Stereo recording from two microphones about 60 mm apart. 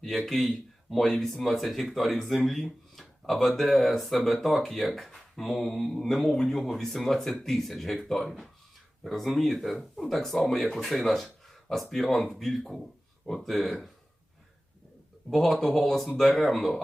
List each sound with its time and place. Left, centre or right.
0.0 s speech: centre
15.3 s speech: centre